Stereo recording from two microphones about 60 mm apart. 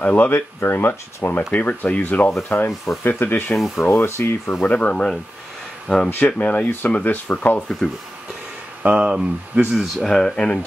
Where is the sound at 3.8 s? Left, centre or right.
Left.